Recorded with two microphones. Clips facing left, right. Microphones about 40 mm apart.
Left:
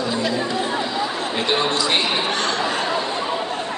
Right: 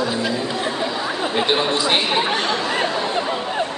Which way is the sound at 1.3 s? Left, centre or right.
Centre.